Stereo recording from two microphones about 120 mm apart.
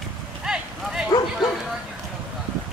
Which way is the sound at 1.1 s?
35° left (ahead or behind).